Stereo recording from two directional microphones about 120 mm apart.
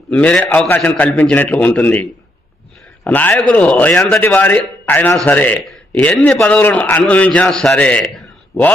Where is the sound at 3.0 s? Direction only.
15° left (ahead or behind).